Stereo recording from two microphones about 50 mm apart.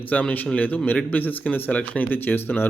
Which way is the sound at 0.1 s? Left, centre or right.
Left.